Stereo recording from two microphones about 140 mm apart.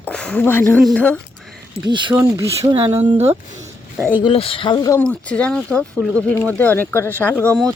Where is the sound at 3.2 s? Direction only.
50° right (ahead or behind).